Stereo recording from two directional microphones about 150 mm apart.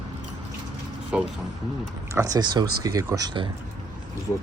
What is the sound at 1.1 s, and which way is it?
Speech, 5° right (ahead or behind).